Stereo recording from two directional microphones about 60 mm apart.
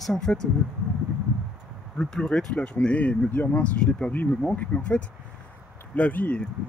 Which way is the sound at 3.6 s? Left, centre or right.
Centre.